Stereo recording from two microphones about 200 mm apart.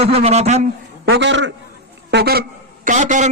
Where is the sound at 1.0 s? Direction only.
60° right (ahead or behind).